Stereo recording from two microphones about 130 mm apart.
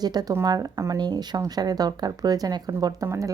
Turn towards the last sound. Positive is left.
turn(degrees=-25)  # may be behind; listen again after turning